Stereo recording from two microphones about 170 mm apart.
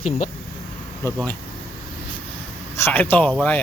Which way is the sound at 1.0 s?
15° left (ahead or behind).